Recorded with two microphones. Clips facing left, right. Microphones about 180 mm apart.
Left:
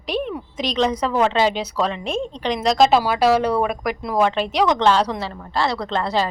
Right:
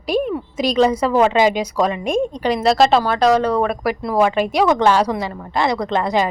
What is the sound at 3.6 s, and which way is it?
Speech, centre (ahead or behind).